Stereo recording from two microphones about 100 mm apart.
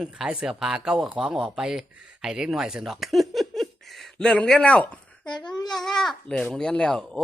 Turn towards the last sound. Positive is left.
turn(degrees=10)  # may be behind; listen again after turning